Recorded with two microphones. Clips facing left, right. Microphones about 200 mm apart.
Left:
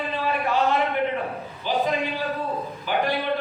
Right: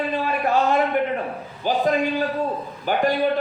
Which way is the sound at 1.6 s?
45° right (ahead or behind).